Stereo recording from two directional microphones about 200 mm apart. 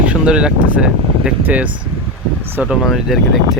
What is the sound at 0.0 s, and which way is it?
Speech, 5° right (ahead or behind).